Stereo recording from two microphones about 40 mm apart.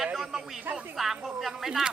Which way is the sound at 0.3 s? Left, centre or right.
Centre.